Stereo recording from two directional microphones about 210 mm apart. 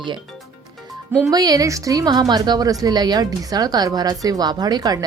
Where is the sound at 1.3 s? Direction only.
20° right (ahead or behind).